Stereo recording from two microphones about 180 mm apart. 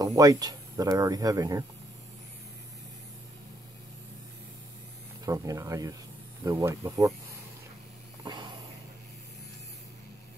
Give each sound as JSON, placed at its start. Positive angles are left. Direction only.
{"t": 0.0, "sound": "speech", "side_deg": -20}
{"t": 5.2, "sound": "speech", "side_deg": -20}
{"t": 8.2, "sound": "a sound", "side_deg": -25}